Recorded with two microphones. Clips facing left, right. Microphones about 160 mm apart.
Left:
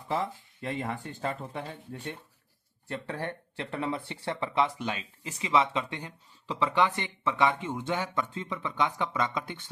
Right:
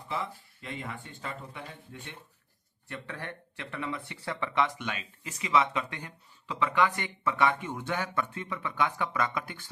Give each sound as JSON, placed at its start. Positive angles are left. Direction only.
{"t": 0.1, "sound": "speech", "side_deg": 45}